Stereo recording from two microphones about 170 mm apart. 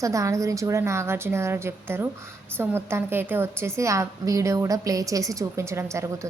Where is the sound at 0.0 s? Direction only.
20° right (ahead or behind).